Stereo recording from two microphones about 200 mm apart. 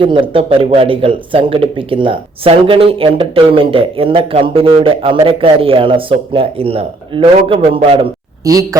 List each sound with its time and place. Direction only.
0.0 s speech: 25° right (ahead or behind)